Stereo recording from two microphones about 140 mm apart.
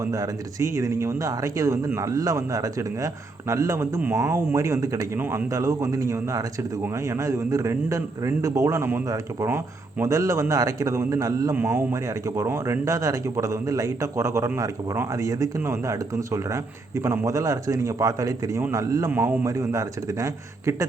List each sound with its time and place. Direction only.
0.0 s speech: 25° right (ahead or behind)